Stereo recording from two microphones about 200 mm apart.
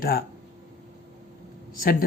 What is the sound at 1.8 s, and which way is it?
Speech, 45° left (ahead or behind).